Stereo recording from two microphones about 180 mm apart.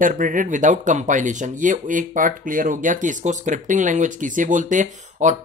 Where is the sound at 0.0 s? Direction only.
45° right (ahead or behind).